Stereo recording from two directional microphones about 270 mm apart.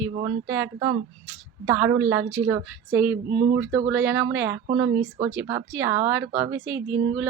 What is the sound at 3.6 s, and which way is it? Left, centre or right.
A woman's voice, centre.